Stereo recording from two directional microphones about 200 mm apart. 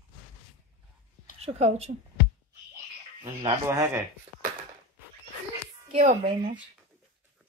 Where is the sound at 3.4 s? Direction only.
15° right (ahead or behind).